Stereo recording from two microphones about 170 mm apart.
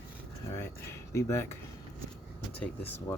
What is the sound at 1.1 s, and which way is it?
Speech, 15° left (ahead or behind).